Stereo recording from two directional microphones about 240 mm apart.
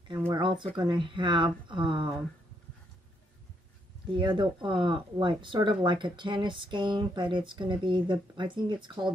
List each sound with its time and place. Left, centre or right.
0.3 s speech: centre
4.1 s speech: centre